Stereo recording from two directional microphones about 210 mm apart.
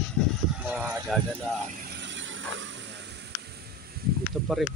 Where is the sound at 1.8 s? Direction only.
50° right (ahead or behind).